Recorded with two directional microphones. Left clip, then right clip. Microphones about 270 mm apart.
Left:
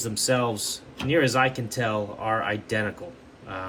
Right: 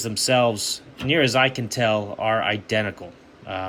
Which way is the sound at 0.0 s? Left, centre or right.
Centre.